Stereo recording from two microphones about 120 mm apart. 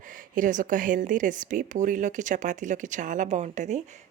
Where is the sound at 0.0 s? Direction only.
90° right.